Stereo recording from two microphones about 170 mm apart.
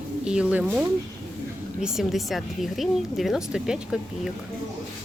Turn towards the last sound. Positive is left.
turn(degrees=-5)  # may be behind; listen again after turning